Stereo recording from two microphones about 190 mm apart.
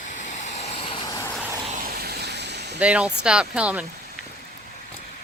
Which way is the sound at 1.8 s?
50° right (ahead or behind).